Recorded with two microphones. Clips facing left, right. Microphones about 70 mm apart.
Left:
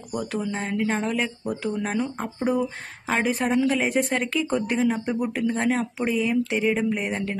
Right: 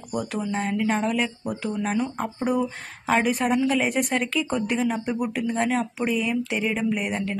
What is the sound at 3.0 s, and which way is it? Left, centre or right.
A man's voice, left.